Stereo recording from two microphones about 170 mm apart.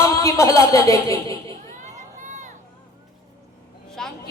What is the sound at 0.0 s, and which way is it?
Speech, 20° left (ahead or behind).